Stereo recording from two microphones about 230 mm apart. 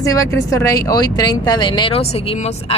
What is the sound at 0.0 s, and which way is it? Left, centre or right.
Speech, centre.